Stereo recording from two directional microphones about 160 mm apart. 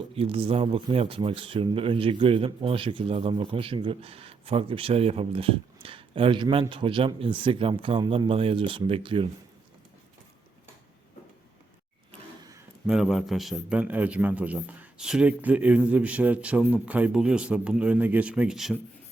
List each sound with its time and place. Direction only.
0.2 s speech: 35° right (ahead or behind)
12.9 s a man's voice: centre (ahead or behind)